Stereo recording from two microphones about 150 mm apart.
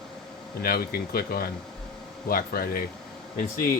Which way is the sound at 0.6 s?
90° left.